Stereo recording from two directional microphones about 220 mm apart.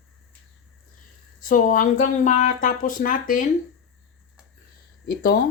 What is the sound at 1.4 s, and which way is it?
Speech, 35° left (ahead or behind).